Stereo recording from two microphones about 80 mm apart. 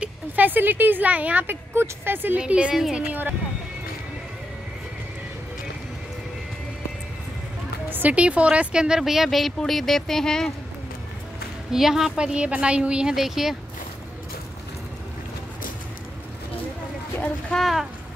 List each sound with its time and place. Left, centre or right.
0.0 s speech: right
2.4 s a woman's voice: centre
7.9 s speech: centre
11.7 s a woman's voice: centre
17.6 s speech: centre